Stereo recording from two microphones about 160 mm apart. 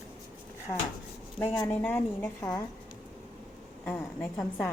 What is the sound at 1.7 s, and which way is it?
Speech, 10° left (ahead or behind).